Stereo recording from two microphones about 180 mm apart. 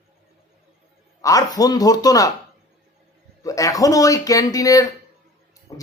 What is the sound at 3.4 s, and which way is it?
Speech, 20° left (ahead or behind).